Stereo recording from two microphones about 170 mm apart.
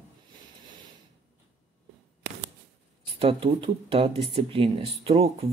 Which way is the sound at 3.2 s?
30° right (ahead or behind).